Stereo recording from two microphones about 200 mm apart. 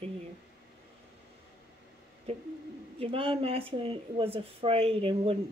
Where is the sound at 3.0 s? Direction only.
25° right (ahead or behind).